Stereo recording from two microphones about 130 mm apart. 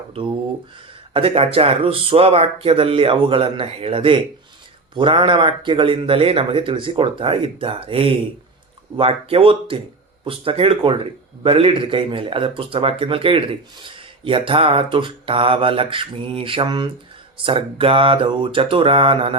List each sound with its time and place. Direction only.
0.1 s speech: 40° right (ahead or behind)